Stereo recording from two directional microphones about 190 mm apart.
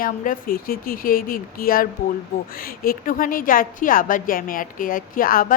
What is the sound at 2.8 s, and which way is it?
A woman's voice, 45° left (ahead or behind).